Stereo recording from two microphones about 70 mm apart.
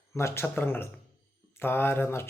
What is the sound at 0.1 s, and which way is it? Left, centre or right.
Speech, left.